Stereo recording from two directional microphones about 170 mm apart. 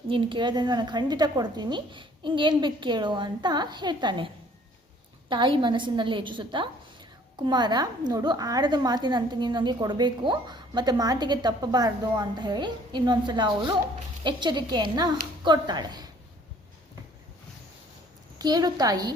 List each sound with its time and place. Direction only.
0.1 s a woman's voice: 30° right (ahead or behind)
5.3 s a woman's voice: 30° right (ahead or behind)
18.3 s a woman's voice: 25° right (ahead or behind)